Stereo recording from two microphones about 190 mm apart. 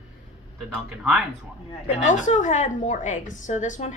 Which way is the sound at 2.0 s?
40° left (ahead or behind).